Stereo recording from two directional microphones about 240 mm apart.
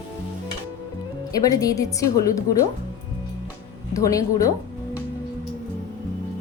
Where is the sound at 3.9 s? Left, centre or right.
Centre.